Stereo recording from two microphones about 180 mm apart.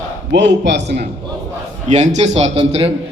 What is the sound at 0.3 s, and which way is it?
Speech, 75° right (ahead or behind).